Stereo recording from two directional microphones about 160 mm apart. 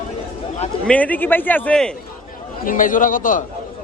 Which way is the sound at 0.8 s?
10° left (ahead or behind).